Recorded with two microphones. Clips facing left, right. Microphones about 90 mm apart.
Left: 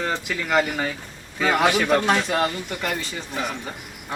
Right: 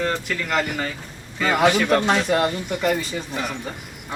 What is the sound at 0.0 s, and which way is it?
Speech, 5° left (ahead or behind).